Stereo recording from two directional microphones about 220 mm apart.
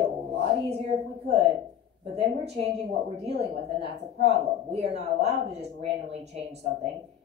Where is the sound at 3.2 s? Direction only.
30° right (ahead or behind).